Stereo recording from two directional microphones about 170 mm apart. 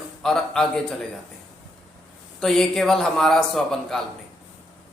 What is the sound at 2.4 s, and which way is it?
A man's voice, 5° left (ahead or behind).